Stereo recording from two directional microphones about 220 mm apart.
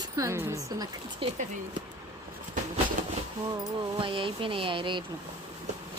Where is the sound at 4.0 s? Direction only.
25° right (ahead or behind).